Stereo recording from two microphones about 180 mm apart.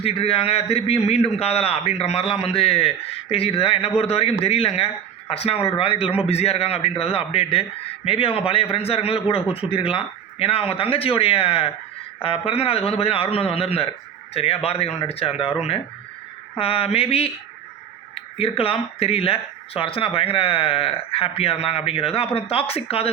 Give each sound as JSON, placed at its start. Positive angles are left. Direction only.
{"t": 0.0, "sound": "speech", "side_deg": 35}
{"t": 16.6, "sound": "speech", "side_deg": 30}